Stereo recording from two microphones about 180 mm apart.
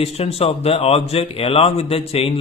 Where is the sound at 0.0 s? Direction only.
35° left (ahead or behind).